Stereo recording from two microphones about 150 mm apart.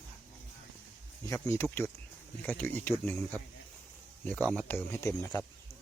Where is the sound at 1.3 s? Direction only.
20° left (ahead or behind).